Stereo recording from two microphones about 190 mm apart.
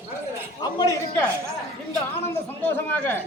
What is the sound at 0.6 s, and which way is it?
Speech, 20° left (ahead or behind).